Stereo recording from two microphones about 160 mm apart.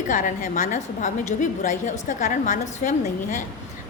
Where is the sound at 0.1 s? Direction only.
50° left (ahead or behind).